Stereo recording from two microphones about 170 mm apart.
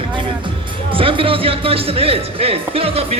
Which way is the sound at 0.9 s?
30° right (ahead or behind).